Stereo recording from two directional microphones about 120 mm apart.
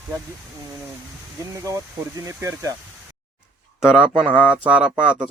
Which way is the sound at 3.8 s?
5° right (ahead or behind).